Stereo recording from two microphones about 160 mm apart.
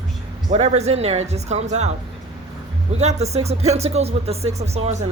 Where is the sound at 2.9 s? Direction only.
45° right (ahead or behind).